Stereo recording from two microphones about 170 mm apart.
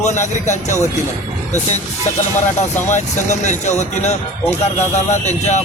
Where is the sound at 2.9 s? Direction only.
45° left (ahead or behind).